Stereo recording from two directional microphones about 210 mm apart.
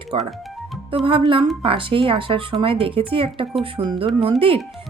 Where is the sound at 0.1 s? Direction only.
25° right (ahead or behind).